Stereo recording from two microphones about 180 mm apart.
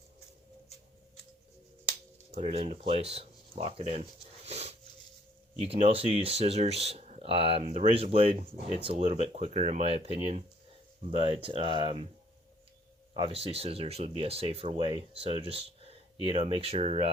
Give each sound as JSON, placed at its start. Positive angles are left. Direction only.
{"t": 2.3, "sound": "speech", "side_deg": -35}
{"t": 4.4, "sound": "a sound", "side_deg": -35}
{"t": 5.5, "sound": "speech", "side_deg": -35}
{"t": 13.1, "sound": "speech", "side_deg": -30}